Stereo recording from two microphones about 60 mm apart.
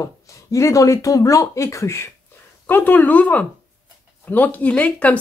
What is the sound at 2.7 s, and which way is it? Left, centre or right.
Speech, left.